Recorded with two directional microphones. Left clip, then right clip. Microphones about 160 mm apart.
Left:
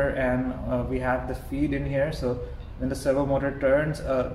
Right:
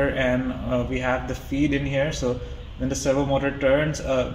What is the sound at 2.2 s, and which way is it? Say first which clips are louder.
A man's voice: right 2 dB; 40° right (ahead or behind).